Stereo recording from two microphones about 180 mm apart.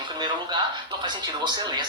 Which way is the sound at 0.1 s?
25° right (ahead or behind).